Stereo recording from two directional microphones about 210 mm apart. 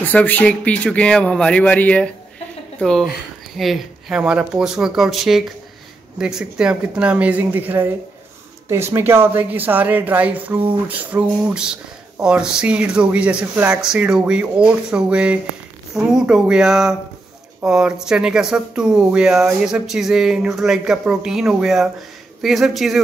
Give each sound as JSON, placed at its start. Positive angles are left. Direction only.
{"t": 0.0, "sound": "speech", "side_deg": 10}